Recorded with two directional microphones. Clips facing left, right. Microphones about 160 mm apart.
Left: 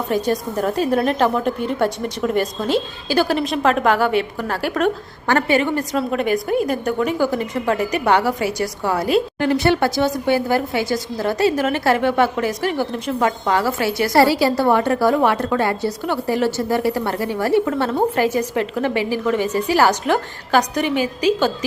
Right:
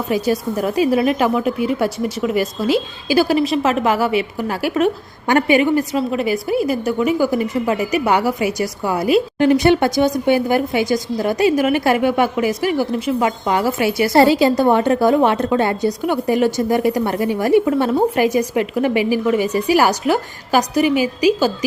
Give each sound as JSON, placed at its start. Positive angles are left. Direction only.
{"t": 0.1, "sound": "a woman's voice", "side_deg": -10}
{"t": 14.1, "sound": "a woman's voice", "side_deg": -20}